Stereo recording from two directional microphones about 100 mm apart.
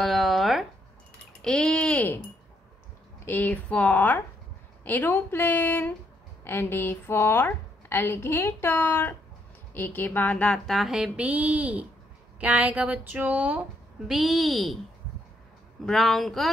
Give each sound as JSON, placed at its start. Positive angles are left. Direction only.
{"t": 0.0, "sound": "a sound", "side_deg": 0}
{"t": 3.3, "sound": "a woman's voice", "side_deg": 20}
{"t": 14.0, "sound": "speech", "side_deg": 0}
{"t": 15.8, "sound": "speech", "side_deg": 0}